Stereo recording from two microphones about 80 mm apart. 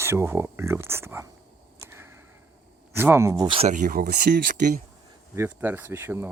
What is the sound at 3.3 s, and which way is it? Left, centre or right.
Speech, right.